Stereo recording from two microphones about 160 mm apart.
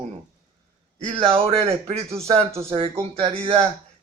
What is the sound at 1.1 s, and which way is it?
Speech, 35° right (ahead or behind).